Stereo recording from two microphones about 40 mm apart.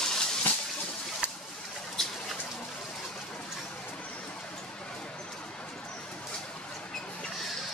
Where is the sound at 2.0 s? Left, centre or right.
Centre.